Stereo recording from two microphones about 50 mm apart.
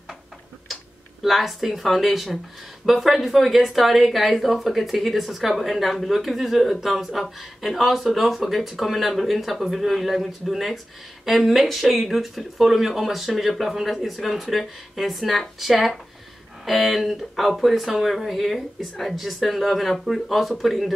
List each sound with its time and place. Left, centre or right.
1.2 s speech: centre